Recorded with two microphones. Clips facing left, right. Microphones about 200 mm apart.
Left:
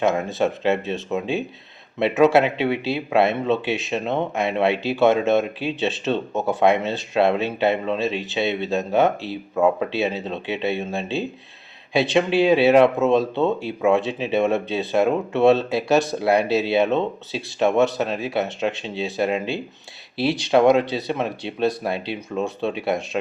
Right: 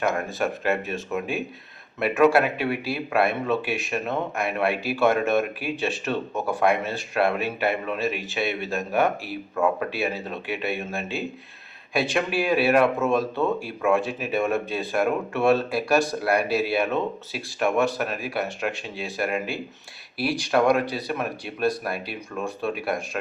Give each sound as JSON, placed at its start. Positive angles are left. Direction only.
{"t": 0.0, "sound": "speech", "side_deg": 20}